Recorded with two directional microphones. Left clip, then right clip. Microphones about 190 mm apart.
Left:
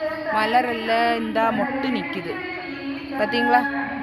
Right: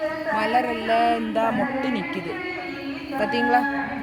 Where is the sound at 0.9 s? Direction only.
40° left (ahead or behind).